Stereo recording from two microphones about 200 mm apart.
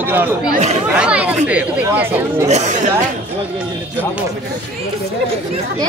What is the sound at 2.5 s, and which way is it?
Speech, 35° right (ahead or behind).